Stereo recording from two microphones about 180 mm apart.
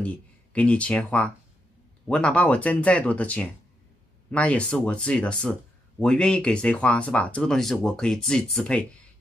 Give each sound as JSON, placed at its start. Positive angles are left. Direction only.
{"t": 0.0, "sound": "speech", "side_deg": 5}